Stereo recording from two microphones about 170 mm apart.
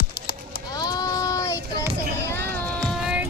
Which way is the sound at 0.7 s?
25° left (ahead or behind).